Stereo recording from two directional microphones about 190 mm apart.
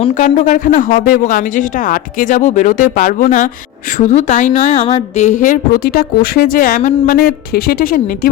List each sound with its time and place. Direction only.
0.0 s a woman's voice: 40° left (ahead or behind)